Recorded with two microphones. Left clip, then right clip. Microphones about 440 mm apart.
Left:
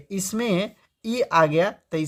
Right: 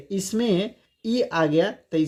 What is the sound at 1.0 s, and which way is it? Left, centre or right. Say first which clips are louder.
Speech: left 3 dB; left.